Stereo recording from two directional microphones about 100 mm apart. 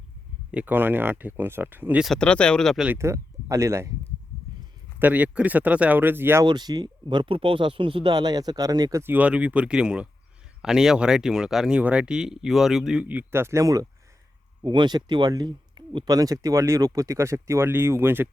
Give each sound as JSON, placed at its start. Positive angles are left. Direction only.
{"t": 0.5, "sound": "speech", "side_deg": -15}
{"t": 2.1, "sound": "speech", "side_deg": 10}
{"t": 2.9, "sound": "speech", "side_deg": -30}
{"t": 4.9, "sound": "speech", "side_deg": -15}
{"t": 6.4, "sound": "speech", "side_deg": -45}
{"t": 9.1, "sound": "speech", "side_deg": -15}
{"t": 14.6, "sound": "speech", "side_deg": -50}
{"t": 16.0, "sound": "speech", "side_deg": -40}